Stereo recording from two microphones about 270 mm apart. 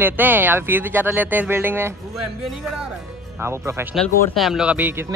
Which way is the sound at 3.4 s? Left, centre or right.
Centre.